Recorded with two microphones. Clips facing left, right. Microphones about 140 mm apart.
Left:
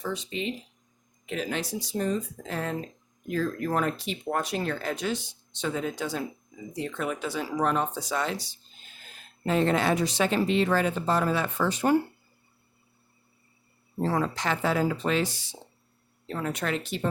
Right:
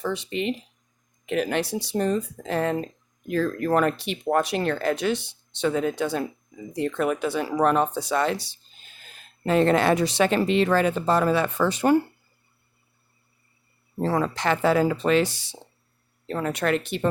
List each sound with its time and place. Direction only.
0.0 s speech: 70° right (ahead or behind)
14.0 s speech: 80° right; by 17.1 s 65° right (ahead or behind)